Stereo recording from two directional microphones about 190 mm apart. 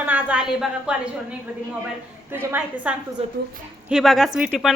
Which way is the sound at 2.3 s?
10° right (ahead or behind).